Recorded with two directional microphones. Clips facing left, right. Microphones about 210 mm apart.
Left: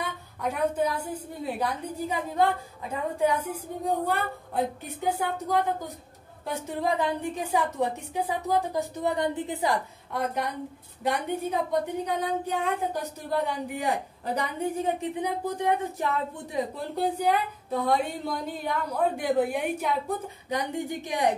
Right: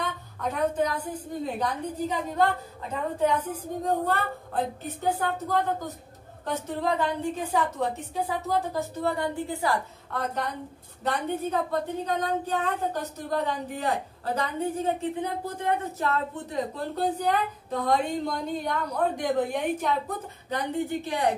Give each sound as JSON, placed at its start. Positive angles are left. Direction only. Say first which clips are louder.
{"t": 0.0, "sound": "speech", "louder": "even", "side_deg": 10}